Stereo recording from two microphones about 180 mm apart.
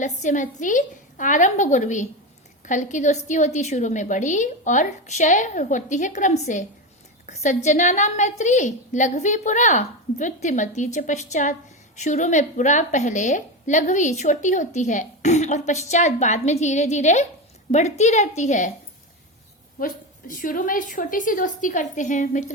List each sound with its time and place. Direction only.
0.0 s a woman's voice: 45° left (ahead or behind)
19.8 s a woman's voice: 50° left (ahead or behind)